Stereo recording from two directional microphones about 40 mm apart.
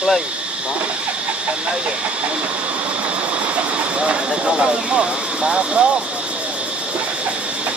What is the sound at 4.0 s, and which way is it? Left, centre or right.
Speech, right.